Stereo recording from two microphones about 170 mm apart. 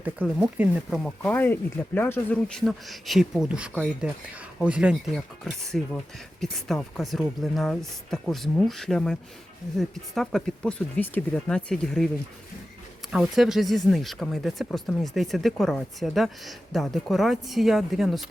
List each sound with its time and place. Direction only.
0.0 s speech: 10° right (ahead or behind)
1.2 s speech: 10° left (ahead or behind)
2.6 s speech: centre (ahead or behind)
13.1 s speech: 5° right (ahead or behind)